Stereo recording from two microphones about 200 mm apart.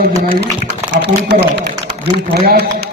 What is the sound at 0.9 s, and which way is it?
A man's voice, 60° right (ahead or behind).